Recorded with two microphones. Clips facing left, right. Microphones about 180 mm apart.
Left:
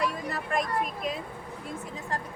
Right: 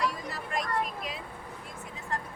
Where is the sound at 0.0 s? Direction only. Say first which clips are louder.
Left 2 dB; 55° left (ahead or behind).